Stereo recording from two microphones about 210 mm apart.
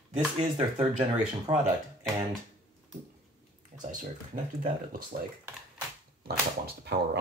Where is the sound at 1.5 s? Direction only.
20° right (ahead or behind).